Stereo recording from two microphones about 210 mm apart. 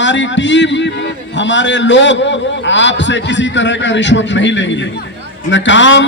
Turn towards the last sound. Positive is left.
turn(degrees=60)  # may be behind; listen again after turning